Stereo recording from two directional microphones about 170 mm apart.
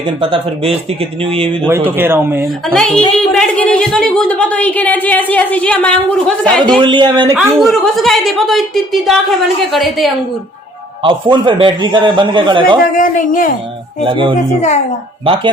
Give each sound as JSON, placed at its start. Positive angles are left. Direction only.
{"t": 0.2, "sound": "speech", "side_deg": -35}
{"t": 1.6, "sound": "speech", "side_deg": -10}
{"t": 2.7, "sound": "a woman's voice", "side_deg": 5}
{"t": 6.7, "sound": "a man's voice", "side_deg": -30}
{"t": 7.3, "sound": "a woman's voice", "side_deg": 0}
{"t": 11.0, "sound": "a man's voice", "side_deg": -30}
{"t": 13.0, "sound": "a man's voice", "side_deg": 50}
{"t": 14.1, "sound": "a man's voice", "side_deg": -30}
{"t": 14.3, "sound": "a man's voice", "side_deg": 40}